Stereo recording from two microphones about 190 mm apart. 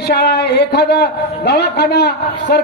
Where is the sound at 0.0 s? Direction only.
60° left (ahead or behind).